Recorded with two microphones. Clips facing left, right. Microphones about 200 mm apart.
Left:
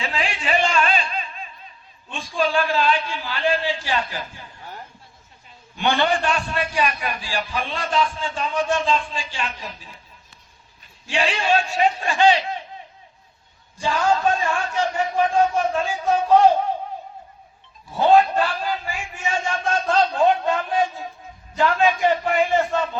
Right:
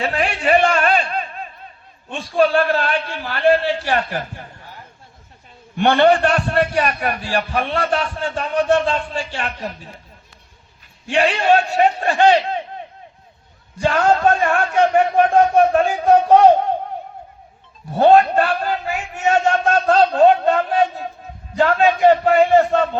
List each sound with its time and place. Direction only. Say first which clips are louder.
0.0 s a sound: right 7 dB; 60° right (ahead or behind)
2.0 s a man's voice: right 7 dB; 60° right (ahead or behind)
5.7 s a man's voice: right 7 dB; 60° right (ahead or behind)
11.0 s a man's voice: right 6 dB; 60° right (ahead or behind)
17.9 s a man's voice: right 4 dB; 60° right (ahead or behind)